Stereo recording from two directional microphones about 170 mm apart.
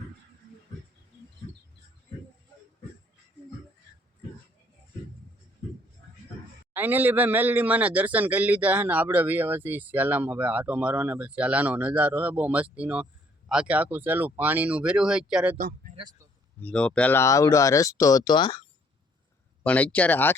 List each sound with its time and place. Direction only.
6.7 s speech: 10° right (ahead or behind)
15.5 s speech: 60° right (ahead or behind)
16.0 s speech: 25° right (ahead or behind)
16.6 s speech: 10° left (ahead or behind); by 18.6 s 25° left (ahead or behind)
19.6 s speech: 10° left (ahead or behind)